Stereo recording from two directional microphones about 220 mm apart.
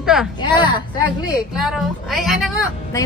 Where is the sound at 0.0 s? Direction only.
5° right (ahead or behind).